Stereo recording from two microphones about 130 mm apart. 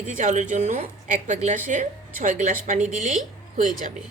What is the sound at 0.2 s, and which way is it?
A woman's voice, 70° right (ahead or behind).